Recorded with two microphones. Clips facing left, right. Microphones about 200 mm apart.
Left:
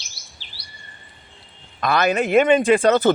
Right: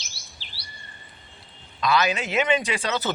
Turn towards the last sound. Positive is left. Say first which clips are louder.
# left 12 dB
turn(degrees=50)  # may be behind; listen again after turning